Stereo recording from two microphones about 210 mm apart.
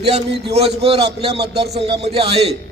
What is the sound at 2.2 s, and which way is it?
Speech, 30° right (ahead or behind).